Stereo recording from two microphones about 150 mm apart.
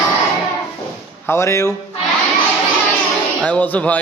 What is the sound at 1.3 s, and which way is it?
Speech, 20° left (ahead or behind).